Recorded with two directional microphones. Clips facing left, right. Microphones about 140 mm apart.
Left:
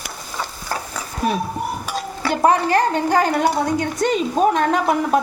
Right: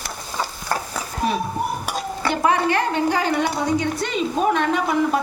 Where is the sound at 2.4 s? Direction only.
40° left (ahead or behind).